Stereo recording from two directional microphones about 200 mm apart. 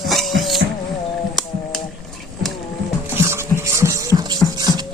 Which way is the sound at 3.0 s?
10° right (ahead or behind).